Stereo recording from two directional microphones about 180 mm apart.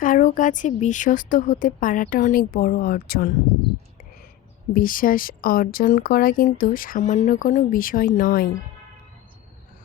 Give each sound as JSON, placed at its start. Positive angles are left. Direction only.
{"t": 0.0, "sound": "speech", "side_deg": 50}
{"t": 4.7, "sound": "speech", "side_deg": 50}